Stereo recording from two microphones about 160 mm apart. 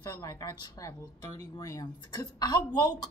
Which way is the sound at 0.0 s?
20° left (ahead or behind).